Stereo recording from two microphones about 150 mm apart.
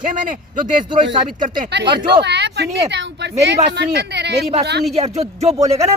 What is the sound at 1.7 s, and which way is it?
Speech, 90° right.